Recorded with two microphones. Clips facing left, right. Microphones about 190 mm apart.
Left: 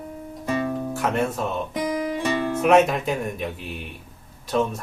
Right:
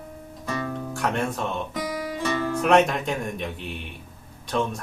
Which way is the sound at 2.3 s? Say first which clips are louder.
Even; 20° left (ahead or behind).